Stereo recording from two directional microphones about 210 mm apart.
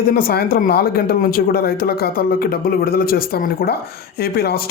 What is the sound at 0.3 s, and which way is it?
Speech, 45° left (ahead or behind).